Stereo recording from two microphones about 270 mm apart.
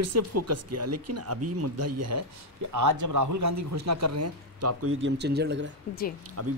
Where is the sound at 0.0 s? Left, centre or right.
Right.